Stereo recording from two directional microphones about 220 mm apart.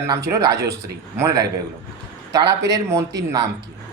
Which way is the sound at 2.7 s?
10° right (ahead or behind).